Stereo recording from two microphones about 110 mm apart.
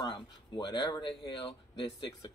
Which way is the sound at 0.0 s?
45° left (ahead or behind).